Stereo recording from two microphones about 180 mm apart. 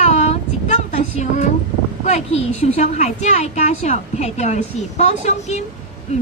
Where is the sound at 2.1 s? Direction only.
35° left (ahead or behind).